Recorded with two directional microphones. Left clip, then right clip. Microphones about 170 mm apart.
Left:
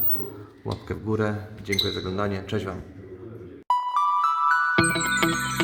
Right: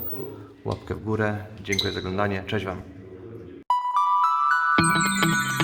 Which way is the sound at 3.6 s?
Centre (ahead or behind).